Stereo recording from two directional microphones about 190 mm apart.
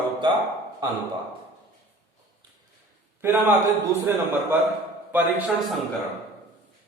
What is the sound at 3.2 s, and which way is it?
A man's voice, 10° right (ahead or behind).